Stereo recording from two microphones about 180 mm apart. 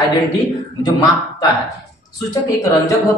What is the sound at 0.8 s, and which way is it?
Speech, 20° left (ahead or behind).